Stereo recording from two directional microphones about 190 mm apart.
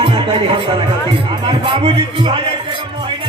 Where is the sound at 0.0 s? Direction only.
30° right (ahead or behind).